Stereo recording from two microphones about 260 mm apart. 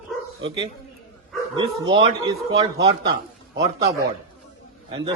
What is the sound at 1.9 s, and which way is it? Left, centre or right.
Speech, centre.